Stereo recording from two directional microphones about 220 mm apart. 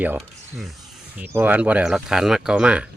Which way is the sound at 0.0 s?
5° right (ahead or behind).